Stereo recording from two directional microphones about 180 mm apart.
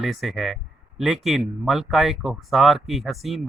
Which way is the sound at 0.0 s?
Centre (ahead or behind).